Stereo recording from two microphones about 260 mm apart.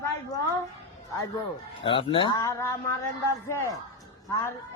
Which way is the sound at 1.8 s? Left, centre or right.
Centre.